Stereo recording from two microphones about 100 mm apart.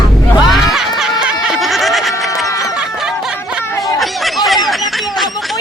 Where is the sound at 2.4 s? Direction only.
35° left (ahead or behind).